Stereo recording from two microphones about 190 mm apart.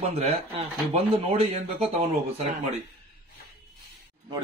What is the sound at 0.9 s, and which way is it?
Speech, 30° right (ahead or behind).